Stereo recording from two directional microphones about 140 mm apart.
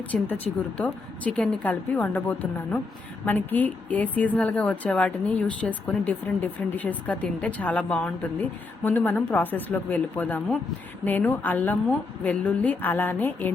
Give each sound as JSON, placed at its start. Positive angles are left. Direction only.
{"t": 0.1, "sound": "a woman's voice", "side_deg": 5}